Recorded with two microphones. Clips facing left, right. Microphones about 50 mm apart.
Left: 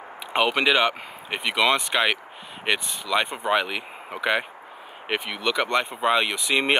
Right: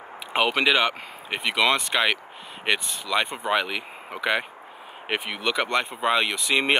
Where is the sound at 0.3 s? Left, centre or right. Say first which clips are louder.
Left 1 dB; centre.